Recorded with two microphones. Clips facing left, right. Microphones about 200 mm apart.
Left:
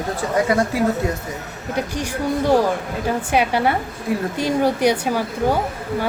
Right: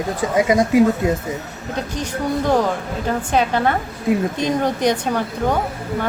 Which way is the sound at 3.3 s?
10° left (ahead or behind).